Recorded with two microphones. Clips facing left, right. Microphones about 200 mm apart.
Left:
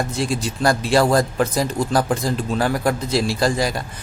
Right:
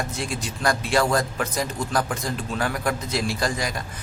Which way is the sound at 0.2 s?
35° left (ahead or behind).